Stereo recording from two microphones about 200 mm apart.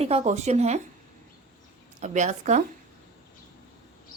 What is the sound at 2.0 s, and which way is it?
Speech, 35° right (ahead or behind).